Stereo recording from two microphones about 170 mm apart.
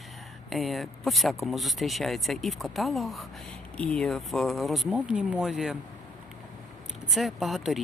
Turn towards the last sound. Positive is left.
turn(degrees=0)  # may be behind; listen again after turning